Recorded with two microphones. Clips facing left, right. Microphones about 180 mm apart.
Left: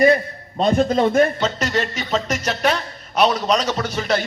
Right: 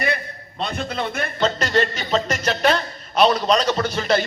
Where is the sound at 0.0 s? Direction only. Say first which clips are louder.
Left 10 dB; 45° left (ahead or behind).